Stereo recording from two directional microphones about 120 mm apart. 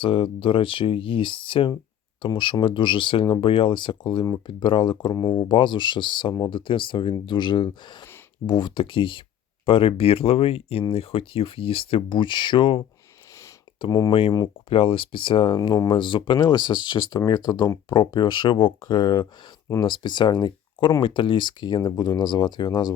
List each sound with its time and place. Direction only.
0.0 s speech: 45° left (ahead or behind)
13.8 s speech: 40° left (ahead or behind)
14.7 s speech: 50° left (ahead or behind)